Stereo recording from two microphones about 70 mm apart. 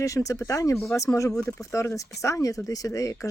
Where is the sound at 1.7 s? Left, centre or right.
Left.